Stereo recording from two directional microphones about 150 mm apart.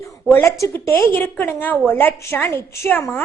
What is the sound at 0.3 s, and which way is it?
A woman's voice, 15° left (ahead or behind).